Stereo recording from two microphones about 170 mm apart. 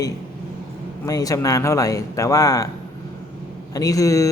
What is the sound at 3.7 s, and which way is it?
Speech, 20° left (ahead or behind).